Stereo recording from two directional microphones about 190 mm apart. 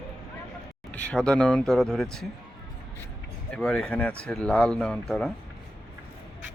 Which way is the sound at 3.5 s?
5° left (ahead or behind).